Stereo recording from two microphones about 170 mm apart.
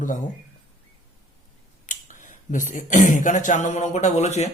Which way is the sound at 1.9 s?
50° left (ahead or behind).